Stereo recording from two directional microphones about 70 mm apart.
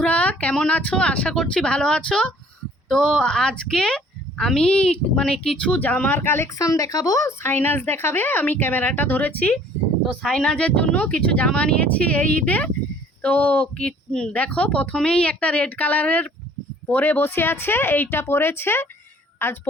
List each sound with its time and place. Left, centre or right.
0.0 s a sound: centre
0.8 s a woman's voice: centre; by 6.5 s left
6.6 s speech: left
7.3 s a woman's voice: left
10.2 s a woman's voice: centre; by 19.6 s left